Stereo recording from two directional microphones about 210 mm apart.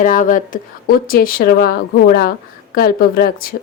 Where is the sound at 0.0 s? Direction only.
40° left (ahead or behind).